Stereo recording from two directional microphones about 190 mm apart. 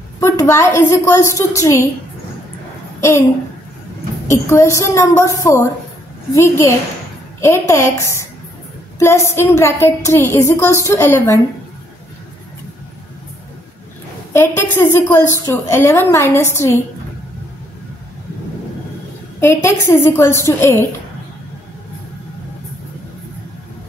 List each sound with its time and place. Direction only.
0.2 s a woman's voice: 15° left (ahead or behind)
3.0 s a woman's voice: 15° left (ahead or behind)
4.3 s a woman's voice: 15° left (ahead or behind)
14.3 s a woman's voice: 10° left (ahead or behind)
19.4 s a woman's voice: 15° left (ahead or behind)